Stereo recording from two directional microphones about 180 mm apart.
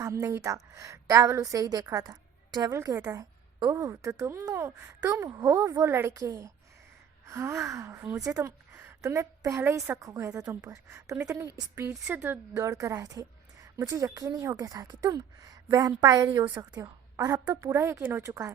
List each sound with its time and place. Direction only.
0.0 s a woman's voice: 15° right (ahead or behind)